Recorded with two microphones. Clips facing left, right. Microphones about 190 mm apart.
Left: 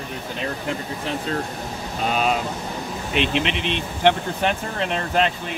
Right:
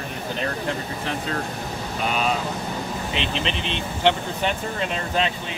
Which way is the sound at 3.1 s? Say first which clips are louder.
Left 7 dB; 60° left (ahead or behind).